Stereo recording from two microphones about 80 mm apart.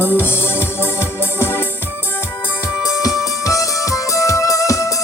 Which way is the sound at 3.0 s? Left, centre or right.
Left.